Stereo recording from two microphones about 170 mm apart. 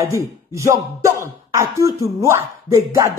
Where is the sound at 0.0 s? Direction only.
15° right (ahead or behind).